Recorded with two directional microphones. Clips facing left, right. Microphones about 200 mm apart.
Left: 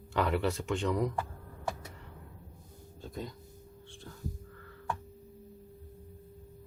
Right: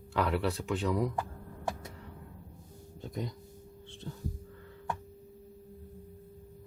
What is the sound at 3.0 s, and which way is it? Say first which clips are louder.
Speech: right 3 dB; 15° right (ahead or behind).